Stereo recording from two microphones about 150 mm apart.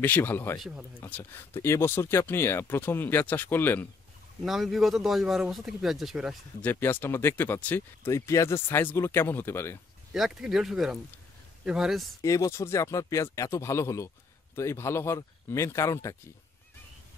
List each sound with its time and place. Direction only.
0.0 s speech: 10° left (ahead or behind)
0.6 s speech: 5° right (ahead or behind)
1.0 s speech: 15° left (ahead or behind)
4.5 s speech: centre (ahead or behind)
6.6 s speech: 10° left (ahead or behind)
10.1 s speech: centre (ahead or behind)
12.2 s speech: 20° left (ahead or behind)